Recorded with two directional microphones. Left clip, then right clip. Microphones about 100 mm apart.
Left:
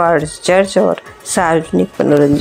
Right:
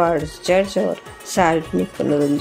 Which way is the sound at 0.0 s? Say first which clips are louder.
Left 6 dB; 30° left (ahead or behind).